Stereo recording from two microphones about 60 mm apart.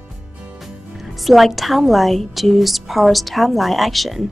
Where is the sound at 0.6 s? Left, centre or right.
Centre.